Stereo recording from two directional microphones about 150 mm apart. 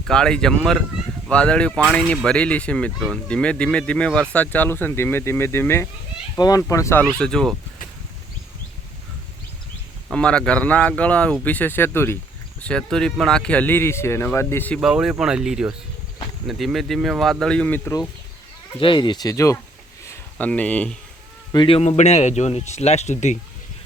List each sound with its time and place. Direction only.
0.1 s speech: 5° left (ahead or behind)
7.2 s speech: 5° left (ahead or behind)
10.1 s speech: 5° left (ahead or behind)
12.6 s speech: 5° left (ahead or behind)
14.8 s speech: 5° right (ahead or behind)
18.8 s speech: 35° left (ahead or behind)
20.1 s speech: 10° left (ahead or behind)
21.5 s speech: 35° left (ahead or behind); by 23.4 s 50° left (ahead or behind)